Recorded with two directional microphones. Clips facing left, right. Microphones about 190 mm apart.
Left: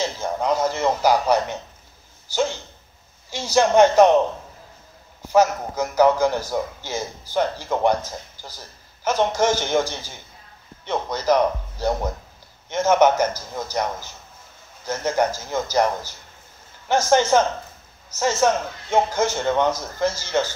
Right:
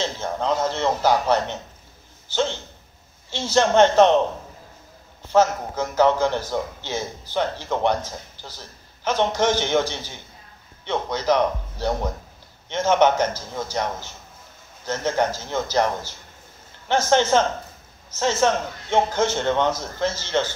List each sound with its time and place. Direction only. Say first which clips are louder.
0.0 s a man's voice: left 1 dB; 10° left (ahead or behind)
5.2 s a man's voice: left 1 dB; 10° left (ahead or behind)